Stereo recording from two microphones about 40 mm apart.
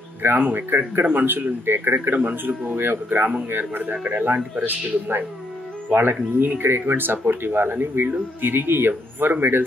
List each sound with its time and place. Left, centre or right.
0.2 s speech: right
2.7 s speech: right
8.4 s speech: right